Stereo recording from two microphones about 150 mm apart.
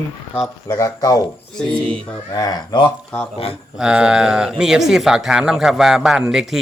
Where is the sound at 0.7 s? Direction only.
25° left (ahead or behind).